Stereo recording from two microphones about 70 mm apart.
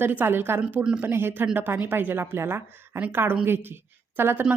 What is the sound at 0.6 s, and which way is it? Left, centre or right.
Speech, centre.